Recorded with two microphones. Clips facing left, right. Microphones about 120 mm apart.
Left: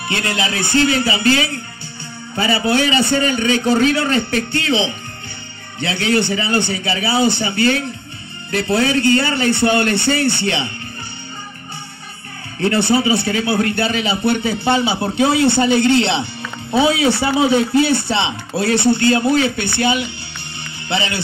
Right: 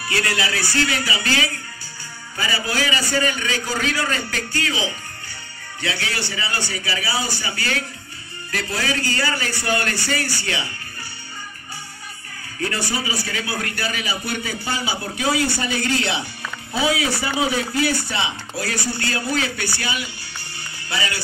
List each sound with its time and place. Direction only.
0.1 s a man's voice: 25° left (ahead or behind)
12.5 s a man's voice: 25° left (ahead or behind)